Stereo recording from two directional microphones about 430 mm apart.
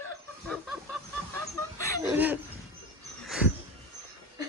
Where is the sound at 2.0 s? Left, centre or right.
Centre.